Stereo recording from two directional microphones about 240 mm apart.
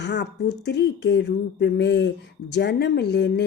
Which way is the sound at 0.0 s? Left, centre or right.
Left.